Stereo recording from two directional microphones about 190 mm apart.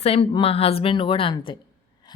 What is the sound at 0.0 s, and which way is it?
Speech, 30° left (ahead or behind).